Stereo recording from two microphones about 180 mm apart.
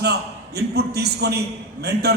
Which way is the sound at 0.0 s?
65° right (ahead or behind).